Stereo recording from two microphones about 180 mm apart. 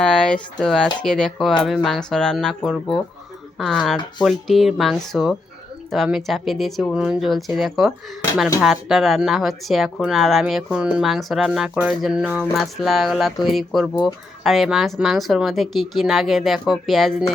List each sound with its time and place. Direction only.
0.0 s speech: 5° left (ahead or behind)